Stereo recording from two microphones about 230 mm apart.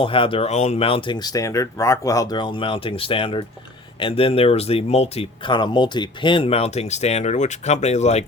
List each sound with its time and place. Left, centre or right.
0.0 s speech: left